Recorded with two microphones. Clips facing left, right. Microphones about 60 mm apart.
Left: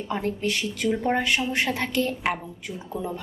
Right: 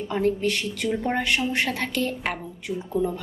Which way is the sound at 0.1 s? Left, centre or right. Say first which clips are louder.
Right 4 dB; centre.